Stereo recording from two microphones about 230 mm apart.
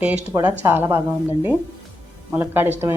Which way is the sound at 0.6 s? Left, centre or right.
Centre.